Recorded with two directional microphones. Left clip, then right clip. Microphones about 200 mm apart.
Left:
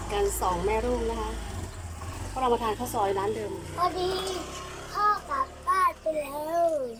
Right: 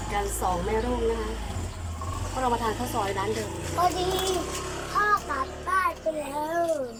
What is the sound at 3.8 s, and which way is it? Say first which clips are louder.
A child's voice: right 3 dB; 10° right (ahead or behind).